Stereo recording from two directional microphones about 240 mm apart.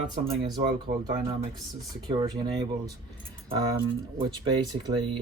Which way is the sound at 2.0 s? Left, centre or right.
Centre.